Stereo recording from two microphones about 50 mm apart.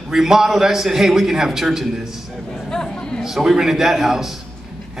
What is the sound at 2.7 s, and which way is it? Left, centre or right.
Chatter, centre.